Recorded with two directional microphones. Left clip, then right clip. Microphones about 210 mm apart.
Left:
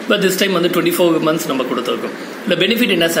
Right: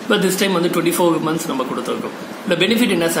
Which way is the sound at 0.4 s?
10° right (ahead or behind).